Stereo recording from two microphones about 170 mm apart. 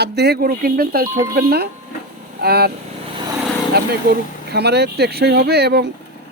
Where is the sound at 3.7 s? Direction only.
70° right (ahead or behind).